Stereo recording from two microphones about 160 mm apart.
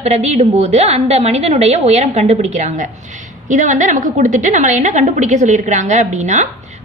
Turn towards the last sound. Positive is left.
turn(degrees=-50)  # may be behind; listen again after turning